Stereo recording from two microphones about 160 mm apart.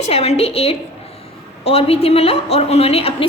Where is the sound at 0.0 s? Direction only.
40° left (ahead or behind).